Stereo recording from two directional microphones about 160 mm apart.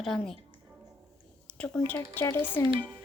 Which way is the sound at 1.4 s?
5° left (ahead or behind).